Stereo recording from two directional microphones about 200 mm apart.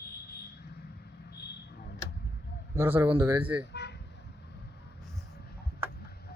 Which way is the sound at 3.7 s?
60° left (ahead or behind).